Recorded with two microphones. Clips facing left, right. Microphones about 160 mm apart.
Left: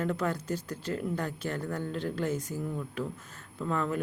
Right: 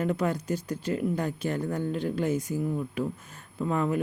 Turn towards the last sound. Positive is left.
turn(degrees=-15)  # may be behind; listen again after turning